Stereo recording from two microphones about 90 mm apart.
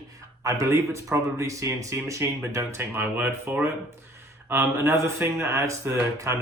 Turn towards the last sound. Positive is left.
turn(degrees=-35)  # may be behind; listen again after turning